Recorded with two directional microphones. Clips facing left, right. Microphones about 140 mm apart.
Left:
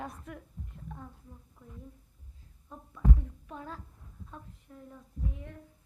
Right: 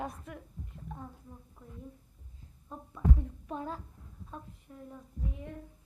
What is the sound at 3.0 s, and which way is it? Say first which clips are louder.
A child's voice: even; 25° right (ahead or behind).